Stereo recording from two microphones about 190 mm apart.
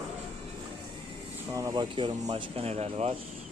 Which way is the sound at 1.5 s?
20° right (ahead or behind).